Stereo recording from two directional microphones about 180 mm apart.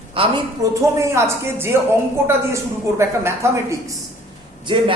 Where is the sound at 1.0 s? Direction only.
15° right (ahead or behind).